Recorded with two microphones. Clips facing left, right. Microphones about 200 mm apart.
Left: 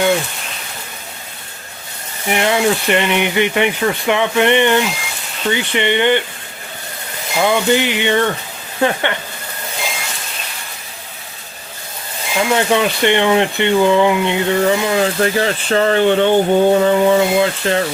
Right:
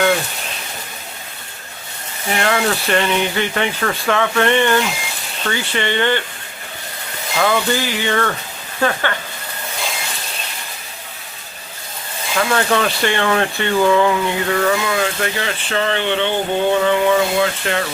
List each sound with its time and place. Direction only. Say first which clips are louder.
2.2 s speech: left 3 dB; 15° left (ahead or behind)
7.3 s speech: left 3 dB; 15° left (ahead or behind)
12.3 s speech: left 2 dB; 15° left (ahead or behind); by 17.8 s 30° left (ahead or behind)